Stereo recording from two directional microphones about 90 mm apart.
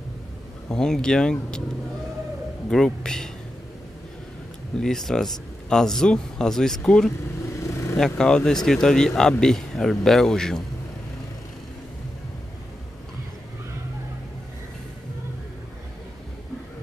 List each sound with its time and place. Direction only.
0.7 s speech: 5° left (ahead or behind)
2.7 s speech: 5° left (ahead or behind)
4.7 s speech: 5° left (ahead or behind)
7.5 s vehicle: 30° left (ahead or behind)
8.0 s speech: 10° left (ahead or behind)